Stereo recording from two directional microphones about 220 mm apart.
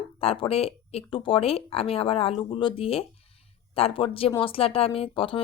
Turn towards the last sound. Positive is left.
turn(degrees=25)  # may be behind; listen again after turning